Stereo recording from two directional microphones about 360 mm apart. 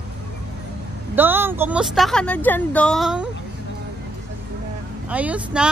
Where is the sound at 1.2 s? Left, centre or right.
Centre.